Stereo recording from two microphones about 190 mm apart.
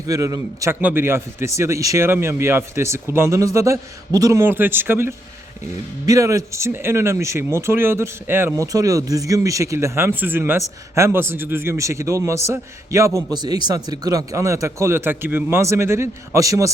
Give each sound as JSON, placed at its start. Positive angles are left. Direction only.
{"t": 0.1, "sound": "speech", "side_deg": -15}